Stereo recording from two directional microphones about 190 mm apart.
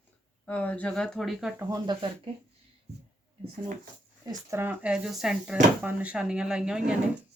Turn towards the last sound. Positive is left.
turn(degrees=-5)  # may be behind; listen again after turning